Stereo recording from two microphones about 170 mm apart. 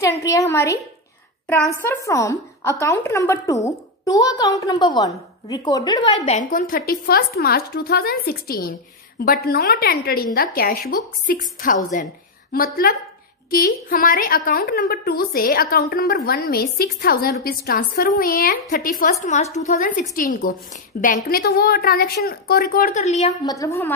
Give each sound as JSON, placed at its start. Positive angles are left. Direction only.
{"t": 0.2, "sound": "a woman's voice", "side_deg": 20}
{"t": 6.3, "sound": "a woman's voice", "side_deg": 55}
{"t": 19.2, "sound": "a woman's voice", "side_deg": 40}
{"t": 19.7, "sound": "a woman's voice", "side_deg": 55}
{"t": 23.4, "sound": "a woman's voice", "side_deg": 20}